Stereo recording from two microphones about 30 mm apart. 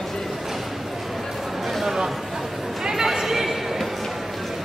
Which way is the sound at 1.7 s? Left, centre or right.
Centre.